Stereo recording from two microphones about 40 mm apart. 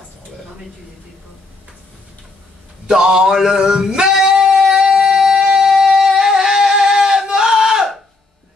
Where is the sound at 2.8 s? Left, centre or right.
Centre.